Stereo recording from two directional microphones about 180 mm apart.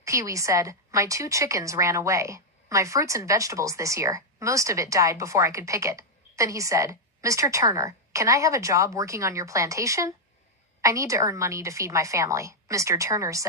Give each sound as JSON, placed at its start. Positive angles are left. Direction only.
{"t": 0.0, "sound": "a woman's voice", "side_deg": -15}